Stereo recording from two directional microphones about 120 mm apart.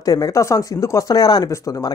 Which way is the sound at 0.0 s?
30° left (ahead or behind).